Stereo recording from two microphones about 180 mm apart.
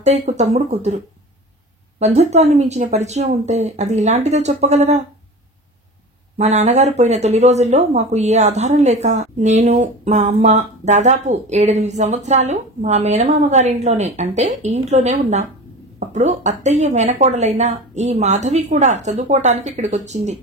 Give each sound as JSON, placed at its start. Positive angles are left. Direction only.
{"t": 0.0, "sound": "speech", "side_deg": -35}
{"t": 6.3, "sound": "speech", "side_deg": -40}